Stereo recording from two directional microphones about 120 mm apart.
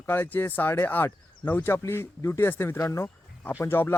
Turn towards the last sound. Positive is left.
turn(degrees=20)  # may be behind; listen again after turning